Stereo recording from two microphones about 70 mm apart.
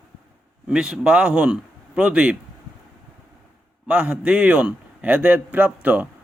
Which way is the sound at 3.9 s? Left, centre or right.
Centre.